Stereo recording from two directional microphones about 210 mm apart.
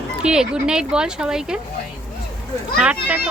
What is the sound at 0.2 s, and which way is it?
Speech, 5° right (ahead or behind).